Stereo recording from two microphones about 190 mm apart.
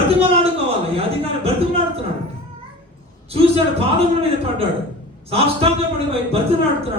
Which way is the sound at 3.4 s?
30° right (ahead or behind).